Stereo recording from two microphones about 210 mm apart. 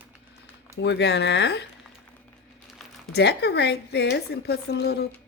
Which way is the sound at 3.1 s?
50° left (ahead or behind).